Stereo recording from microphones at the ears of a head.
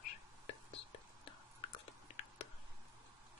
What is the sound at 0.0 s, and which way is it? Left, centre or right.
Whispering, left.